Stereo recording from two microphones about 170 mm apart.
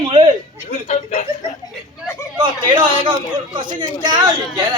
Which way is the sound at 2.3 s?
30° right (ahead or behind).